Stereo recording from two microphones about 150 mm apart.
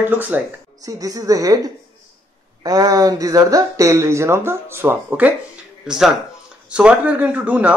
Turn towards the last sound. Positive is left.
turn(degrees=-10)  # may be behind; listen again after turning